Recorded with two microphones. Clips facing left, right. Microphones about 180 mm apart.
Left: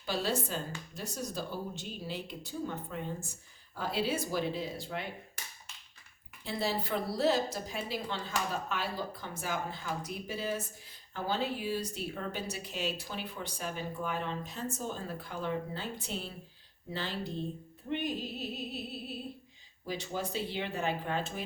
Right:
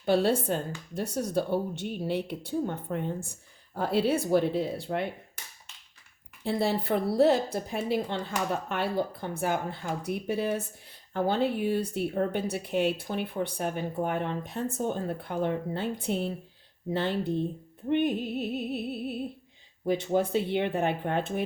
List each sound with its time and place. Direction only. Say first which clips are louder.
0.0 s speech: right 9 dB; 60° right (ahead or behind)
6.4 s speech: right 6 dB; 60° right (ahead or behind)